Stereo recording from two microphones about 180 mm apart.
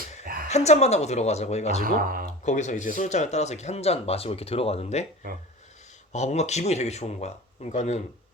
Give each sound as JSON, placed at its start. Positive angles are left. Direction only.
{"t": 0.4, "sound": "speech", "side_deg": 40}
{"t": 1.8, "sound": "speech", "side_deg": -50}
{"t": 2.4, "sound": "speech", "side_deg": 40}
{"t": 6.1, "sound": "speech", "side_deg": 40}